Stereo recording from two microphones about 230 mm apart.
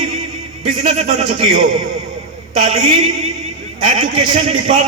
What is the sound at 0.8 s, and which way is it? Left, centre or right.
Speech, right.